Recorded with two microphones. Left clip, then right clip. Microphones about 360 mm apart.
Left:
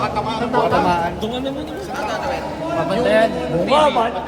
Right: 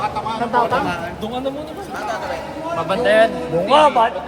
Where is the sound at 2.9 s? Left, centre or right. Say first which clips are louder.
Right 2 dB; right.